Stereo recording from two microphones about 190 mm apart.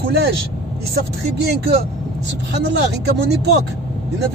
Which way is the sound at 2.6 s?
60° right (ahead or behind).